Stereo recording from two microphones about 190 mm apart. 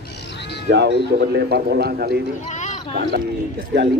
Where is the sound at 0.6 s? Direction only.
65° right (ahead or behind).